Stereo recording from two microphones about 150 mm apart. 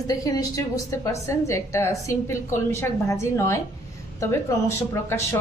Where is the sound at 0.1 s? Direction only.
25° left (ahead or behind).